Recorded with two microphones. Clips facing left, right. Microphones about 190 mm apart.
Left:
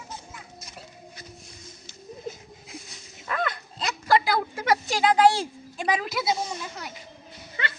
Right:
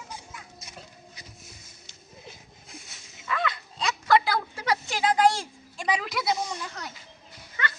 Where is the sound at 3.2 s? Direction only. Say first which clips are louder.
Left 1 dB; 50° left (ahead or behind).